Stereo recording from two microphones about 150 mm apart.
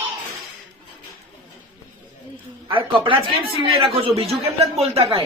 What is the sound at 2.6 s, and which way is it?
A man's voice, 35° right (ahead or behind).